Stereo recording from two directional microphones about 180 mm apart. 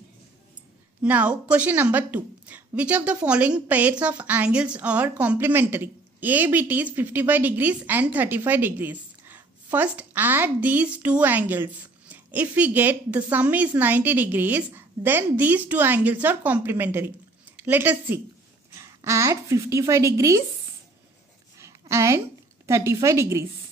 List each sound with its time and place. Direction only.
1.0 s a woman's voice: 10° right (ahead or behind)
21.5 s a sound: 15° right (ahead or behind)
22.7 s a woman's voice: 15° right (ahead or behind)